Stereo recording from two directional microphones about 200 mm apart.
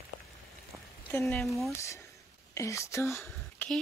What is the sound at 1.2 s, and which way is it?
Speech, centre (ahead or behind).